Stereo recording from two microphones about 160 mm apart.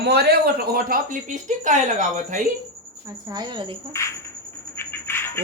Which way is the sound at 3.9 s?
20° left (ahead or behind).